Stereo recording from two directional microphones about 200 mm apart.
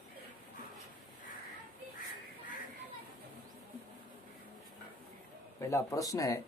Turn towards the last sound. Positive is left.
turn(degrees=15)  # may be behind; listen again after turning